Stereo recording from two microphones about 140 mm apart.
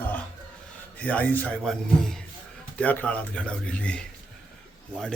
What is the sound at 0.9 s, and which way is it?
A man's voice, 10° left (ahead or behind).